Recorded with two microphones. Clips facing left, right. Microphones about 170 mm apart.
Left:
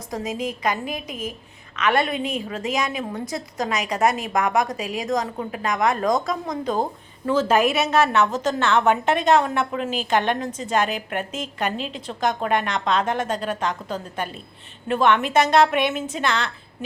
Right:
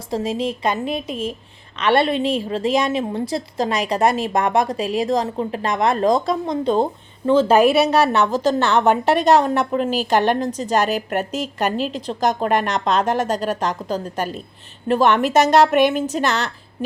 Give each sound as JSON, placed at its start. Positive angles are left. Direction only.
{"t": 0.1, "sound": "a woman's voice", "side_deg": -30}